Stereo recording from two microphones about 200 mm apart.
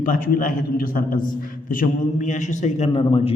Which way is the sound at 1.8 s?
40° left (ahead or behind).